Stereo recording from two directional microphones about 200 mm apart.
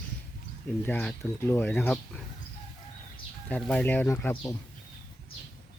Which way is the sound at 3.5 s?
5° left (ahead or behind).